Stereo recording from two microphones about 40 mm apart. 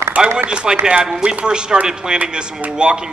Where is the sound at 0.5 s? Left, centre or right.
Right.